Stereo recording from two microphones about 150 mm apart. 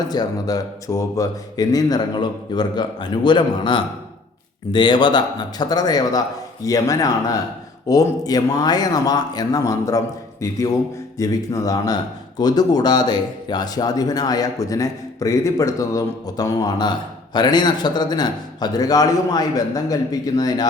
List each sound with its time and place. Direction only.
0.1 s speech: 25° left (ahead or behind)